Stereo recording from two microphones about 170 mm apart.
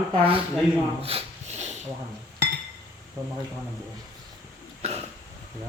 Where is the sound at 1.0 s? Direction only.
40° right (ahead or behind).